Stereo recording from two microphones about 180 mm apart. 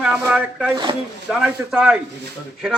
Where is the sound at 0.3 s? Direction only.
10° right (ahead or behind).